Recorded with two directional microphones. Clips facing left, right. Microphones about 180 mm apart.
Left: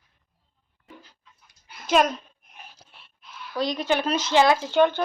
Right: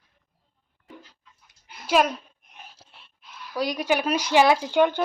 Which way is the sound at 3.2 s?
5° right (ahead or behind).